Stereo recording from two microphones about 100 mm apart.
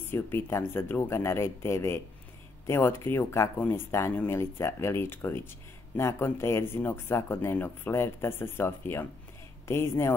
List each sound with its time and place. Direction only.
0.0 s speech: 25° left (ahead or behind)